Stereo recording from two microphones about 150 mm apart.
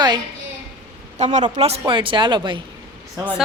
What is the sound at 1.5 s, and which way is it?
Speech, 40° right (ahead or behind).